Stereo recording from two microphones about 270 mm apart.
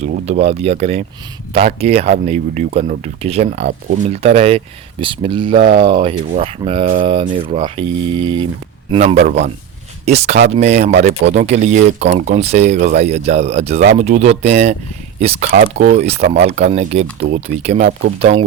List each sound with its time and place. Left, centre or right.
0.0 s speech: right
17.2 s speech: right
17.4 s speech: right